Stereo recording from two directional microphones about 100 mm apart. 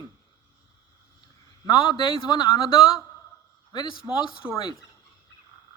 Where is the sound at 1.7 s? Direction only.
50° left (ahead or behind).